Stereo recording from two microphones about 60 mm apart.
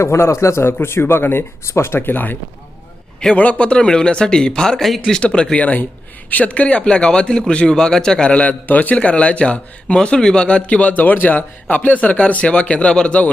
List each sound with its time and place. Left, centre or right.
0.0 s a man's voice: left
3.3 s speech: left; by 5.2 s centre
5.2 s a man's voice: centre